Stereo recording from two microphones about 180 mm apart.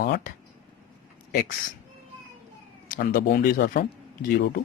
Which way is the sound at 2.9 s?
50° left (ahead or behind).